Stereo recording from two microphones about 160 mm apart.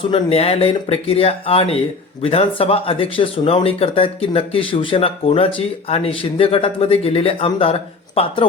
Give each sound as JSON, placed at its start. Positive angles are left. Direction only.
{"t": 0.1, "sound": "speech", "side_deg": 40}